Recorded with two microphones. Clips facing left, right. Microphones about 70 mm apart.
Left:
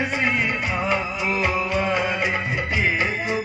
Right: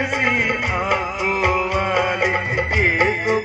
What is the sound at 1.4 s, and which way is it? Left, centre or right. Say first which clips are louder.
Music: right 4 dB; right.